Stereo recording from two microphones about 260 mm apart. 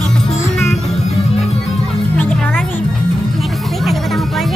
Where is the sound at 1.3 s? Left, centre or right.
Left.